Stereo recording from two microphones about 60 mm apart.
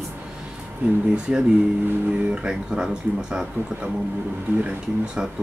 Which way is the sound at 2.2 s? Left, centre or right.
Centre.